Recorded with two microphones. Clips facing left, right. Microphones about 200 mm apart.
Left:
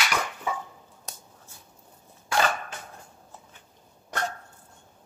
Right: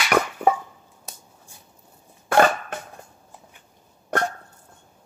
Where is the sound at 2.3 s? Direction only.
55° right (ahead or behind).